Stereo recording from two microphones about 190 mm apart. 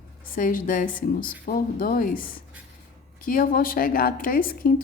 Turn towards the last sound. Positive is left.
turn(degrees=50)  # may be behind; listen again after turning